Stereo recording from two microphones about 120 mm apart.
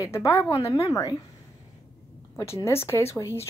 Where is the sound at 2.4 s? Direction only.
25° left (ahead or behind).